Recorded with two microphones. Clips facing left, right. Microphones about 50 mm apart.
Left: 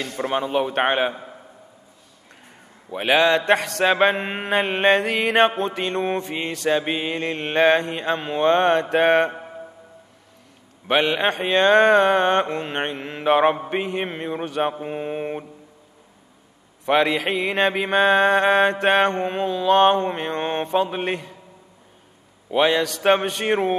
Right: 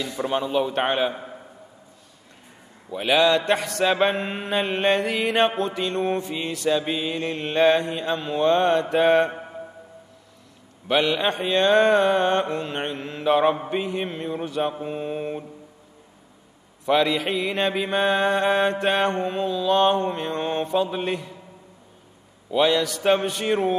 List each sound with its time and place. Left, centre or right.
0.0 s mantra: left
2.9 s mantra: left
10.9 s mantra: left
14.8 s mantra: left
16.8 s mantra: left
22.5 s mantra: left